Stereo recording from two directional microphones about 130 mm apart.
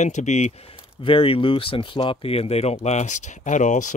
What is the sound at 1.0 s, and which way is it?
Speech, 45° left (ahead or behind).